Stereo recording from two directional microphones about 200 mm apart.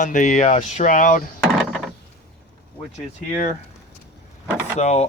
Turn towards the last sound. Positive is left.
turn(degrees=35)  # may be behind; listen again after turning